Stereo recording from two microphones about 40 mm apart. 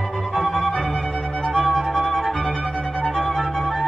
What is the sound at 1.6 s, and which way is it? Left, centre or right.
Music, centre.